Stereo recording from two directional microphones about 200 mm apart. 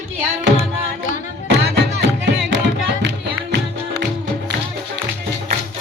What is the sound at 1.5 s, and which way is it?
Music, 60° right (ahead or behind).